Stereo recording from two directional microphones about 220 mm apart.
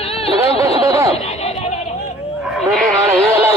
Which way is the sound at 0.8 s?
15° right (ahead or behind).